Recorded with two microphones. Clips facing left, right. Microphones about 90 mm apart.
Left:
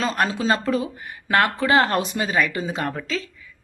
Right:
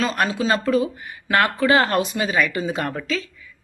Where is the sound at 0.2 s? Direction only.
30° left (ahead or behind).